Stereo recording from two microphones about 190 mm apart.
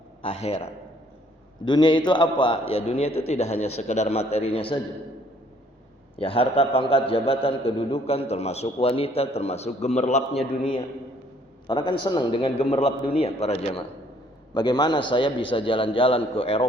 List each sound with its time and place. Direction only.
0.2 s a man's voice: 30° left (ahead or behind)
6.1 s a man's voice: 30° left (ahead or behind)